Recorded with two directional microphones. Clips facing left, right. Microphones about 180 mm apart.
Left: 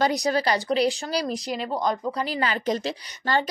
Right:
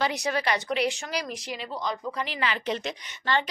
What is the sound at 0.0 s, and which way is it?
Speech, 35° left (ahead or behind).